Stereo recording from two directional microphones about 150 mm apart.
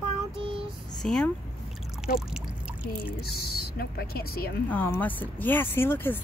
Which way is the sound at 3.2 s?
90° left.